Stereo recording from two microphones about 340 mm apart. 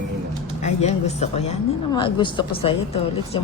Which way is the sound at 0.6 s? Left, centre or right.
Centre.